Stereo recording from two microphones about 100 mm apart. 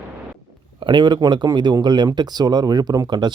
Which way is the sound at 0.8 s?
50° right (ahead or behind).